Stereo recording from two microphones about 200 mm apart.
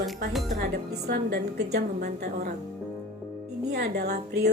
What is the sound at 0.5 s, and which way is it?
Speech, 50° right (ahead or behind).